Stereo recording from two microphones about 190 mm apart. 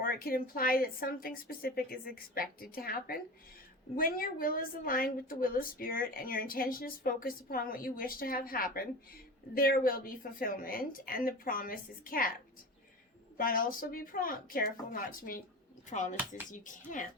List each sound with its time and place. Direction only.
0.0 s a woman's voice: 50° left (ahead or behind)
13.3 s a woman's voice: 50° left (ahead or behind)